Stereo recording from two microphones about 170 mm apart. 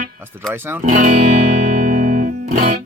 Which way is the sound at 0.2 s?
15° right (ahead or behind).